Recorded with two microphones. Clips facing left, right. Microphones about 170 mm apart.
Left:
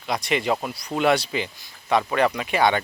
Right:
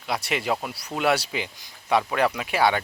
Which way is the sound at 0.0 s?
5° right (ahead or behind).